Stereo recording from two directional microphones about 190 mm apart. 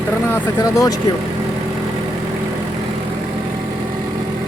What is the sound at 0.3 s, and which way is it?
Speech, 20° left (ahead or behind).